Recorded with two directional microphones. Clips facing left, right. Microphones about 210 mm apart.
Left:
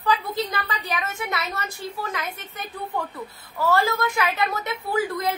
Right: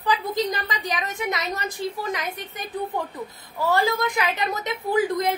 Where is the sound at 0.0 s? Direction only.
15° right (ahead or behind).